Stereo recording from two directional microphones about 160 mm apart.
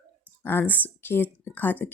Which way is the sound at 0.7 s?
10° left (ahead or behind).